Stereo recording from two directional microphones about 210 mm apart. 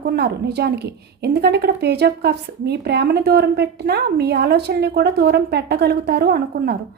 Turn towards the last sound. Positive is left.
turn(degrees=-50)  # may be behind; listen again after turning